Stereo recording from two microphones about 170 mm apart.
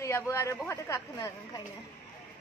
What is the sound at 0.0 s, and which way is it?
A woman's voice, 15° left (ahead or behind).